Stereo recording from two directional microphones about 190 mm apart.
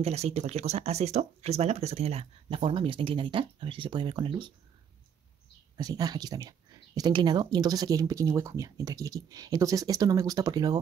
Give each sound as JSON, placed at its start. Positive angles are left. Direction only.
{"t": 0.0, "sound": "speech", "side_deg": -35}
{"t": 5.8, "sound": "speech", "side_deg": -20}